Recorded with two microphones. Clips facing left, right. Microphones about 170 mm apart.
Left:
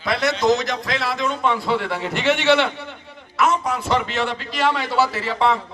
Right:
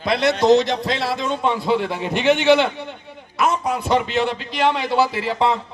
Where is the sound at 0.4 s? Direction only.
30° right (ahead or behind).